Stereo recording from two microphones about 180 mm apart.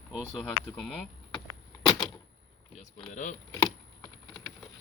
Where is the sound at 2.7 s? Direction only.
35° left (ahead or behind).